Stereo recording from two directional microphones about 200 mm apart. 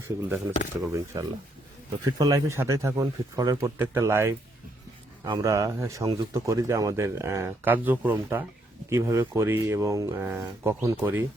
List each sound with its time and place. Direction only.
0.2 s speech: 10° right (ahead or behind)